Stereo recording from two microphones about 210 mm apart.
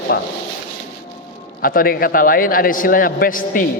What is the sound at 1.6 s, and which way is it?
A man's voice, 40° left (ahead or behind).